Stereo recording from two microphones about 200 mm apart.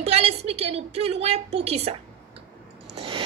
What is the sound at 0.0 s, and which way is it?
A woman's voice, 30° right (ahead or behind).